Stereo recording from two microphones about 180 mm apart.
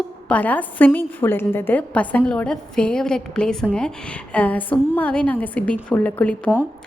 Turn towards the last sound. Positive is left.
turn(degrees=10)  # may be behind; listen again after turning